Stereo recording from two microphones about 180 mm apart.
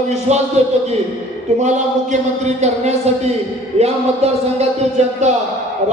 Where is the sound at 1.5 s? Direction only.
40° right (ahead or behind).